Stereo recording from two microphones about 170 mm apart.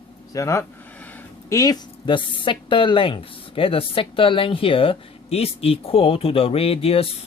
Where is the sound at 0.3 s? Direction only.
20° left (ahead or behind).